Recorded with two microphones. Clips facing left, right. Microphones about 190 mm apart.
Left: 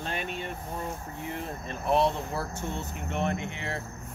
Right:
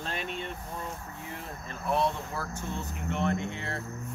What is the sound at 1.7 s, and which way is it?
Speech, 25° left (ahead or behind).